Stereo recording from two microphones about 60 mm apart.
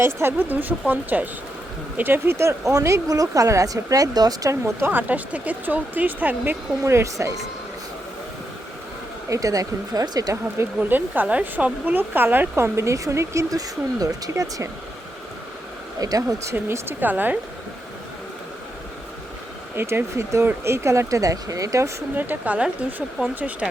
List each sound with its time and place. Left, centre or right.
0.0 s speech: right
4.9 s speech: right
6.8 s speech: right
9.3 s speech: right
10.8 s speech: right
12.5 s speech: right
13.5 s speech: right
16.0 s speech: right
16.5 s speech: right
17.0 s speech: right
19.7 s speech: right
20.7 s speech: right
22.1 s speech: right
22.5 s speech: centre